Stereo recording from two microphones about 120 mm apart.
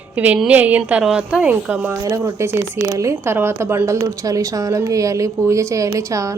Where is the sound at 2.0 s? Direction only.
25° right (ahead or behind).